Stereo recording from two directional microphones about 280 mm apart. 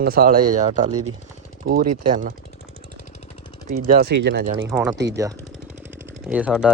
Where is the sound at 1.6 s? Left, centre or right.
Right.